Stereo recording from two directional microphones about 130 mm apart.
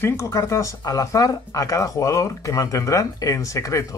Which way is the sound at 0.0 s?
20° left (ahead or behind).